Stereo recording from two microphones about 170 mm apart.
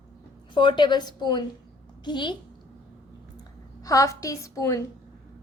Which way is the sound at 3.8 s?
20° left (ahead or behind).